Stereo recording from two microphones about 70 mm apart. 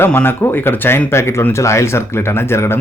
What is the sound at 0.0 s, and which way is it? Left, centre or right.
Speech, left.